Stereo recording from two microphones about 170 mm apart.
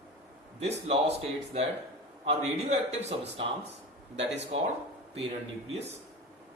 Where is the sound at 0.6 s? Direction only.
40° right (ahead or behind).